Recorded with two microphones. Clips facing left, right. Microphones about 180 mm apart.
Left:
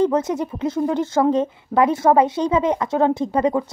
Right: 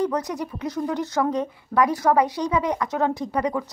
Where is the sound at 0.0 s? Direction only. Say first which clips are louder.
Left 6 dB; 25° left (ahead or behind).